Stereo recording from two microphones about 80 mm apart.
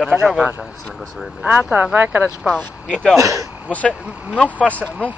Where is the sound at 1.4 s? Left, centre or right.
Centre.